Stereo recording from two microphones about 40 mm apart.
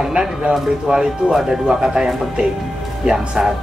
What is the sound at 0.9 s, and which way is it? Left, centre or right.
Speech, centre.